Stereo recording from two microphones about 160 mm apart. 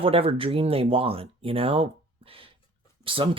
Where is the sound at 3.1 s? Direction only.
35° right (ahead or behind).